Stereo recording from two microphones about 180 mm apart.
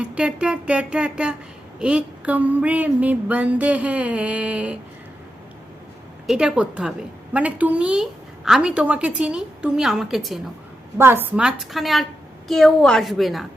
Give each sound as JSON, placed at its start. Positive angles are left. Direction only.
{"t": 0.0, "sound": "a woman's voice", "side_deg": -5}
{"t": 1.8, "sound": "a sound", "side_deg": -5}
{"t": 6.2, "sound": "a woman's voice", "side_deg": -5}
{"t": 7.3, "sound": "a sound", "side_deg": -10}
{"t": 8.4, "sound": "a woman's voice", "side_deg": -5}
{"t": 10.9, "sound": "a woman's voice", "side_deg": -15}